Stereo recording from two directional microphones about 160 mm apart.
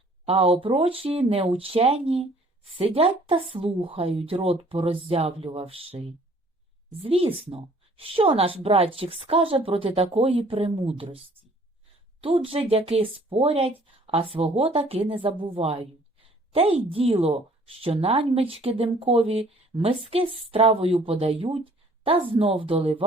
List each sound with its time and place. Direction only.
0.3 s a woman's voice: 40° right (ahead or behind)
12.2 s a woman's voice: 35° right (ahead or behind)